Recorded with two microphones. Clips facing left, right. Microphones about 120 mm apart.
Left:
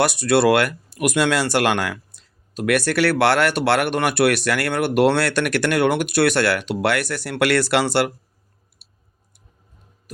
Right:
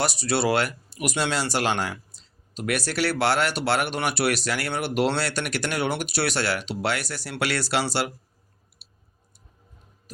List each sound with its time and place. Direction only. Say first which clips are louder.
0.0 s speech: left 7 dB; 55° left (ahead or behind)